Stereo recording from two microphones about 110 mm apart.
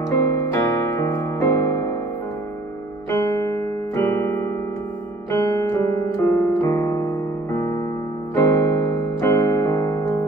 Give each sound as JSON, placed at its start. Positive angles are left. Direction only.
{"t": 0.2, "sound": "music", "side_deg": 30}
{"t": 3.1, "sound": "keyboard", "side_deg": 30}
{"t": 5.3, "sound": "piano", "side_deg": 30}